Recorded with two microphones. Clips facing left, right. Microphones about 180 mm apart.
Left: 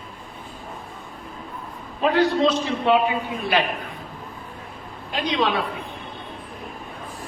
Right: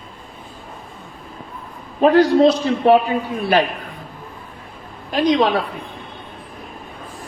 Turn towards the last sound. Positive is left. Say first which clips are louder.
# right 7 dB
turn(degrees=-40)  # may be behind; listen again after turning